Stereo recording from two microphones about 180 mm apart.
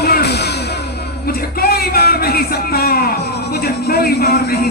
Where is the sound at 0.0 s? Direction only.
65° left (ahead or behind).